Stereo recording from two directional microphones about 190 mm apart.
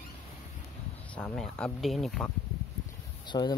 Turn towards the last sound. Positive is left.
turn(degrees=25)  # may be behind; listen again after turning